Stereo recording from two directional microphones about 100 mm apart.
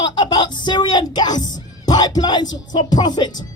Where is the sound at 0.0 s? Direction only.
50° left (ahead or behind).